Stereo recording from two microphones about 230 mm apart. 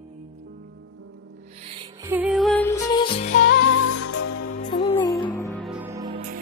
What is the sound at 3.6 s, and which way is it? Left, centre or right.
Music, left.